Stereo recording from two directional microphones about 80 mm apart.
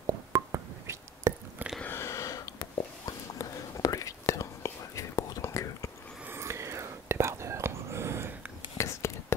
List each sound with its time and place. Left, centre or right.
0.0 s a sound: right
1.9 s whispering: left
6.2 s whispering: right
8.7 s whispering: left